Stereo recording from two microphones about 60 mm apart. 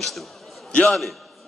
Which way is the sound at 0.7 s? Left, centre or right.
Centre.